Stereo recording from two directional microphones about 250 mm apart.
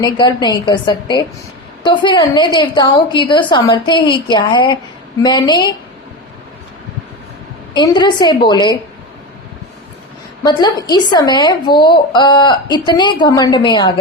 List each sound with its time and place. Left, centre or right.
0.0 s a woman's voice: centre
7.7 s a woman's voice: centre
10.4 s a woman's voice: centre